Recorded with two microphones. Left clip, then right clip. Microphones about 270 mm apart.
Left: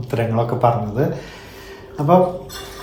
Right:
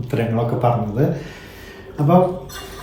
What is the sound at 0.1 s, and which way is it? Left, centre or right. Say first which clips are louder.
Speech: left 1 dB; centre.